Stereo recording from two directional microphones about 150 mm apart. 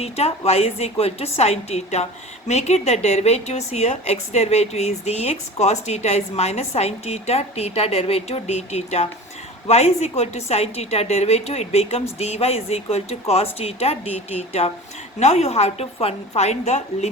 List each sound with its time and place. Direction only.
0.0 s a woman's voice: 45° left (ahead or behind)